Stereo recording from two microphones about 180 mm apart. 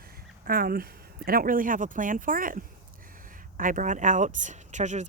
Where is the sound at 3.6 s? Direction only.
45° right (ahead or behind).